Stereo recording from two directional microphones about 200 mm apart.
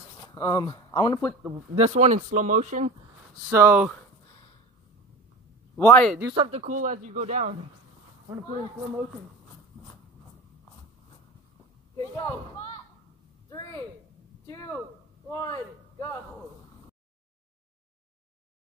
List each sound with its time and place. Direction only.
0.2 s speech: 15° left (ahead or behind)
1.8 s speech: 35° right (ahead or behind)
3.4 s speech: 10° right (ahead or behind)
5.8 s speech: 10° left (ahead or behind)
6.3 s speech: 25° right (ahead or behind)
6.6 s speech: 40° right (ahead or behind)
8.3 s speech: 10° right (ahead or behind)
12.0 s speech: 20° left (ahead or behind)
13.5 s a sound: 15° left (ahead or behind)
15.3 s a man's voice: 15° left (ahead or behind)